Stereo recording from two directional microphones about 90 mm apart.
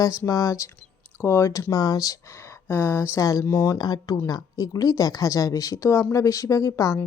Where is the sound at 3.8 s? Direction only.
50° left (ahead or behind).